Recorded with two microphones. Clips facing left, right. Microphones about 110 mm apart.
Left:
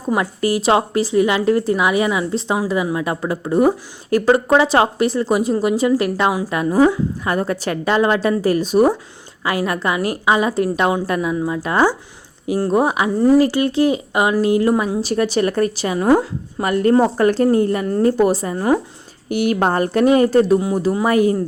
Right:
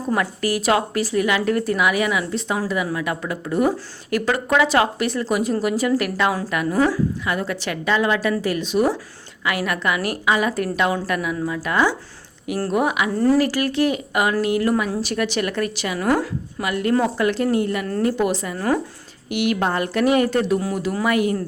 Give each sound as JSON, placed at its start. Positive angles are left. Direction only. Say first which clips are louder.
{"t": 0.1, "sound": "speech", "louder": "left 4 dB", "side_deg": 25}
{"t": 7.3, "sound": "speech", "louder": "left 4 dB", "side_deg": 35}
{"t": 13.1, "sound": "speech", "louder": "left 5 dB", "side_deg": 15}
{"t": 16.6, "sound": "speech", "louder": "left 6 dB", "side_deg": 40}
{"t": 18.5, "sound": "speech", "louder": "left 4 dB", "side_deg": 20}
{"t": 19.3, "sound": "speech", "louder": "left 4 dB", "side_deg": 40}